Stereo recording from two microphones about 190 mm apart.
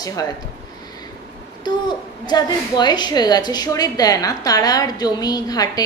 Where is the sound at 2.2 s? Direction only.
20° left (ahead or behind).